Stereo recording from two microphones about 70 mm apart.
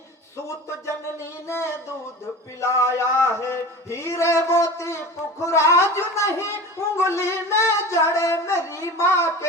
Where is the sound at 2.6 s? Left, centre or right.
Left.